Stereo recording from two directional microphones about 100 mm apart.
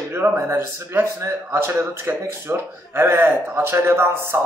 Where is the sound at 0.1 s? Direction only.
25° right (ahead or behind).